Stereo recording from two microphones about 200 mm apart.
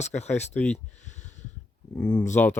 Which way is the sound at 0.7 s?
35° left (ahead or behind).